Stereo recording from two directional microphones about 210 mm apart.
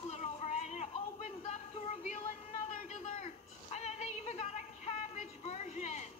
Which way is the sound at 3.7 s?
30° left (ahead or behind).